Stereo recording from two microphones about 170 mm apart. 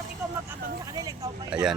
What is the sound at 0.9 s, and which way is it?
Vehicle, 20° right (ahead or behind).